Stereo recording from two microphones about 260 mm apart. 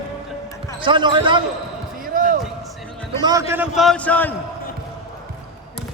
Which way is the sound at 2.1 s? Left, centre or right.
Right.